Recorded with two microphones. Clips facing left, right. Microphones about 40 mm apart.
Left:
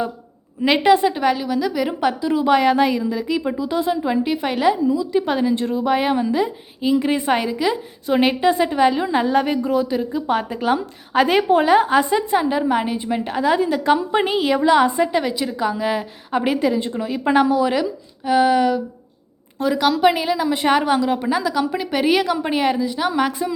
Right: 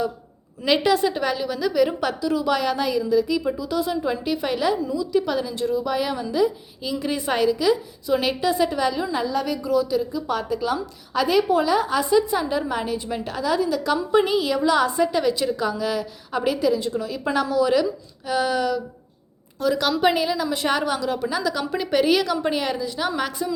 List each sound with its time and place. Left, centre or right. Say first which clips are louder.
0.6 s a woman's voice: left 4 dB; left
1.1 s a woman's voice: left 5 dB; centre
5.2 s a woman's voice: left 5 dB; left
19.8 s a woman's voice: left 5 dB; centre
20.2 s a woman's voice: left 4 dB; centre
21.6 s a woman's voice: left 1 dB; centre